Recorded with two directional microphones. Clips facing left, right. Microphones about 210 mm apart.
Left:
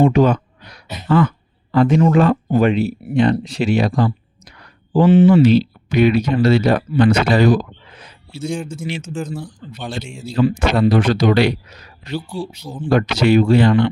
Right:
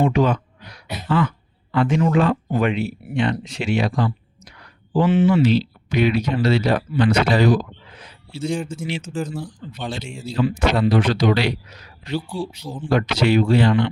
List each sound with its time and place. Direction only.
0.0 s a sound: 40° left (ahead or behind)
1.0 s speech: 45° left (ahead or behind)
8.7 s speech: 45° left (ahead or behind)
9.1 s speech: 5° right (ahead or behind)
10.2 s speech: 45° left (ahead or behind)